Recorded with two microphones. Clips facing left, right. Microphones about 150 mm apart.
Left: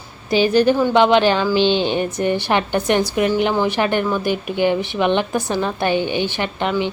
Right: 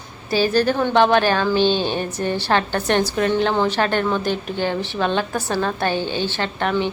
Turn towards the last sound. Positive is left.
turn(degrees=15)  # may be behind; listen again after turning